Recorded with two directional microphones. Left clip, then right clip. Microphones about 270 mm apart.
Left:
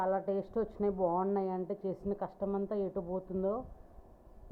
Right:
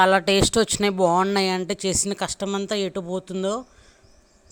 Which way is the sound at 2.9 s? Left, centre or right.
Right.